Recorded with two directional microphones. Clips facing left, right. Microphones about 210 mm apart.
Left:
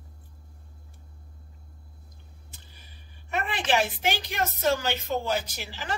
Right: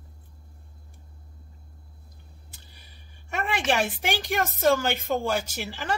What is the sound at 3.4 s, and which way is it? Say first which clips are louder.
A woman's voice: right 1 dB; 45° right (ahead or behind).